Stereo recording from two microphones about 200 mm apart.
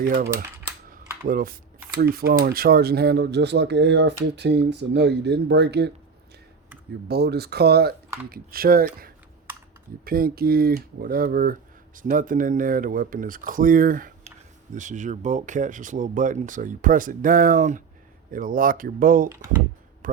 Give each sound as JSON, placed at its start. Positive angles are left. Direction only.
{"t": 0.9, "sound": "mechanisms", "side_deg": -45}
{"t": 2.0, "sound": "speech", "side_deg": -50}
{"t": 7.1, "sound": "speech", "side_deg": -55}